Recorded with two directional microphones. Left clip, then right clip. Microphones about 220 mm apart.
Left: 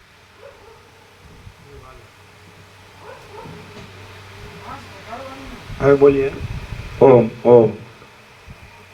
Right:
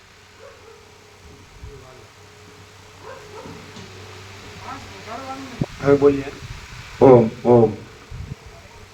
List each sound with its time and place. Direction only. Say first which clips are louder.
5.8 s speech: left 4 dB; 50° left (ahead or behind)